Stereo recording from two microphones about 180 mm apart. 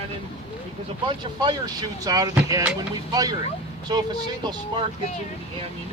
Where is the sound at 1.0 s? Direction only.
25° right (ahead or behind).